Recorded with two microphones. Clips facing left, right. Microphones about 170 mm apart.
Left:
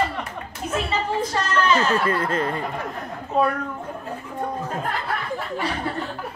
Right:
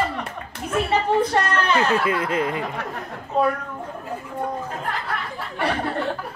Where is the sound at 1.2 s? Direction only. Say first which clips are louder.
Right 2 dB; 60° right (ahead or behind).